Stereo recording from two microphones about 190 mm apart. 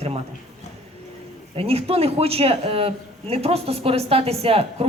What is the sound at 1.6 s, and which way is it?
A man's voice, 30° right (ahead or behind).